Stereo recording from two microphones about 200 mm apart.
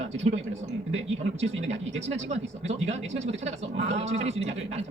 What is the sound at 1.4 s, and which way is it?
Speech, 35° right (ahead or behind).